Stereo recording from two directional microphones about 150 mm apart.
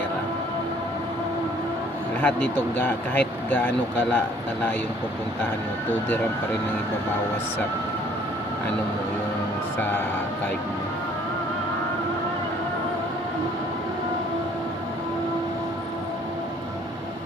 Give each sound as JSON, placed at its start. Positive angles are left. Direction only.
{"t": 2.2, "sound": "speech", "side_deg": 10}